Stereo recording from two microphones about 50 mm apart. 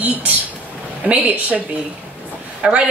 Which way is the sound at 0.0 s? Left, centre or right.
Right.